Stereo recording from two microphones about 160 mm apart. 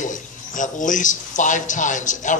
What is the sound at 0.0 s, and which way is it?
A man's voice, 55° left (ahead or behind).